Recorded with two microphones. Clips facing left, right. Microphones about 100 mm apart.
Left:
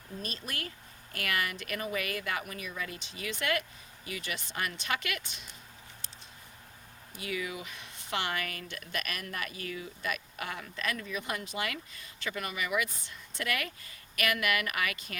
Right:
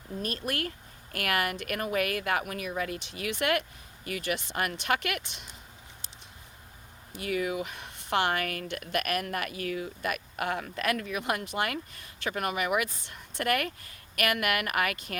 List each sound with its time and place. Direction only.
0.2 s speech: 60° right (ahead or behind)
7.2 s speech: 55° right (ahead or behind)